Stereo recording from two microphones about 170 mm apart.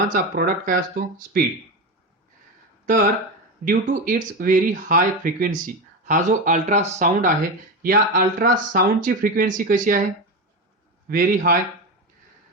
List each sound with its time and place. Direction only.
0.1 s speech: 55° right (ahead or behind)
2.8 s speech: 50° right (ahead or behind)
11.1 s speech: 55° right (ahead or behind)